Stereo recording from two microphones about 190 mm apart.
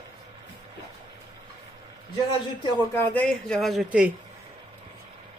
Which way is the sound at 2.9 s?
5° left (ahead or behind).